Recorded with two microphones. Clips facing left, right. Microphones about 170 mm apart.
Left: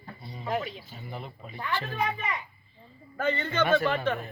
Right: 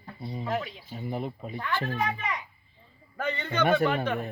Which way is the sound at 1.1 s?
45° right (ahead or behind).